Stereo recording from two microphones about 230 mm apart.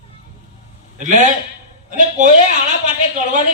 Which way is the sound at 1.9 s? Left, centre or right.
Right.